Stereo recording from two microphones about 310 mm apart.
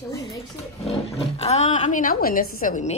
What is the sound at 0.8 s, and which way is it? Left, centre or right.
Speech, centre.